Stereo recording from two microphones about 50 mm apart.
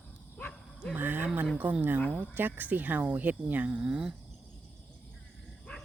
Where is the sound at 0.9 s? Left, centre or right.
Right.